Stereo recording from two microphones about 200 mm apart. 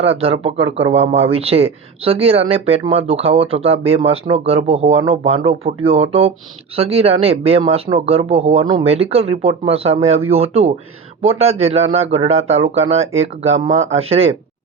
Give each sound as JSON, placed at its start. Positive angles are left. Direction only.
{"t": 0.0, "sound": "speech", "side_deg": -30}